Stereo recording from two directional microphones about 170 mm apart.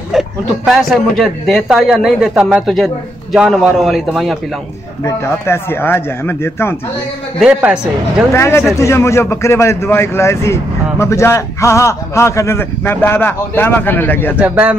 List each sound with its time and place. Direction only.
0.1 s a man's voice: centre (ahead or behind)
5.0 s a man's voice: 15° left (ahead or behind)
7.3 s a man's voice: 5° right (ahead or behind)
8.3 s a man's voice: 15° left (ahead or behind)
14.4 s speech: 10° right (ahead or behind)